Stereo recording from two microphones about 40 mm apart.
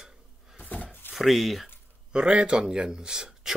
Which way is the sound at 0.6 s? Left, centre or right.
Left.